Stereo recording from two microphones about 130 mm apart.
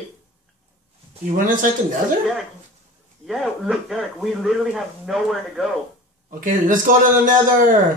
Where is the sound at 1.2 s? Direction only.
90° right.